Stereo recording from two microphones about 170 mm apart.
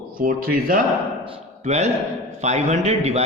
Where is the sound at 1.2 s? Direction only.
40° right (ahead or behind).